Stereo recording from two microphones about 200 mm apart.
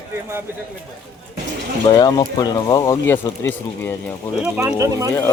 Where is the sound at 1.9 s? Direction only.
20° left (ahead or behind).